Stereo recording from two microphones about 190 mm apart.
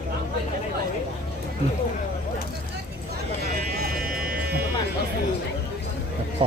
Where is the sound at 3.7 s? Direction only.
55° right (ahead or behind).